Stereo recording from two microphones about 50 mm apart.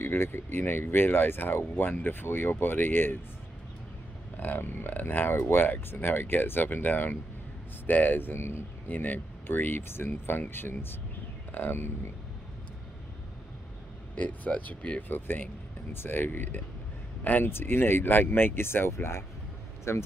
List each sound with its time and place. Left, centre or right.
0.0 s speech: left
4.4 s speech: left
8.8 s speech: left
14.1 s speech: left
15.0 s speech: left
17.5 s speech: left